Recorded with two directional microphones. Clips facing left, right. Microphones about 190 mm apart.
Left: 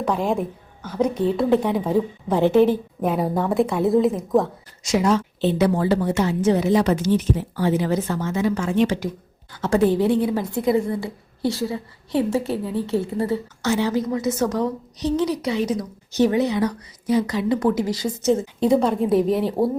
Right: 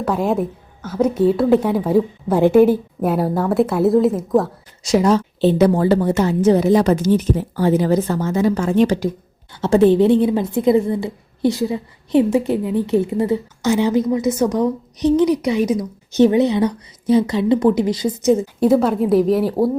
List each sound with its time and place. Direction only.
0.0 s a woman's voice: 5° right (ahead or behind)
4.8 s a woman's voice: 35° right (ahead or behind)
9.5 s a woman's voice: 25° right (ahead or behind); by 19.7 s 5° right (ahead or behind)